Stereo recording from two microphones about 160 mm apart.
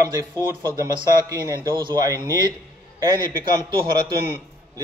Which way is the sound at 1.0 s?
20° right (ahead or behind).